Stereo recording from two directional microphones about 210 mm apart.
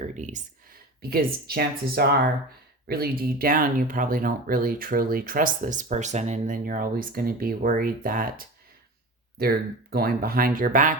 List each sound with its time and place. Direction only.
0.2 s speech: 35° right (ahead or behind)